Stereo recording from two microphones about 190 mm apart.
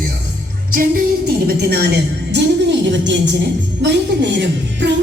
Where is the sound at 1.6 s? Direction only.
55° right (ahead or behind).